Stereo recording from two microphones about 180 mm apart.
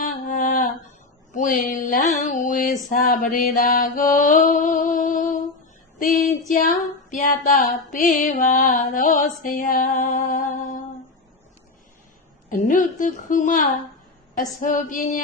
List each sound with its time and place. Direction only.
0.0 s a sound: 40° left (ahead or behind)
6.0 s music: 45° left (ahead or behind)
12.5 s music: 45° left (ahead or behind)